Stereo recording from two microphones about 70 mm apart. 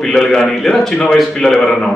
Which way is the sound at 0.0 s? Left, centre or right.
Centre.